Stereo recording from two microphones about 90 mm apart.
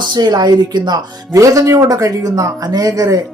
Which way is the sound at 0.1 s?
55° right (ahead or behind).